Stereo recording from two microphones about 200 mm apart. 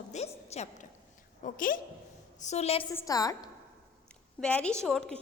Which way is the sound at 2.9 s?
15° left (ahead or behind).